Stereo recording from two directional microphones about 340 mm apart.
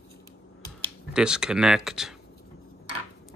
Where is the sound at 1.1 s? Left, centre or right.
Centre.